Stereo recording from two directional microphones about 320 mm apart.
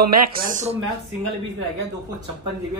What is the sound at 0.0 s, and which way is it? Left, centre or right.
Speech, right.